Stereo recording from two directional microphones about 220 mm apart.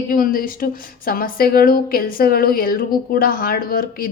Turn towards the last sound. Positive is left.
turn(degrees=40)  # may be behind; listen again after turning